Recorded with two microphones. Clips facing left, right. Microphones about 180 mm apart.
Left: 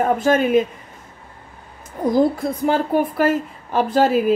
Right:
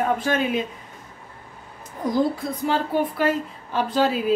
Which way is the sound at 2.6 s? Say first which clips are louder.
Left 4 dB; 50° left (ahead or behind).